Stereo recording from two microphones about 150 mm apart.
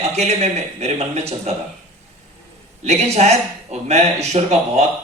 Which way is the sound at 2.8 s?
50° right (ahead or behind).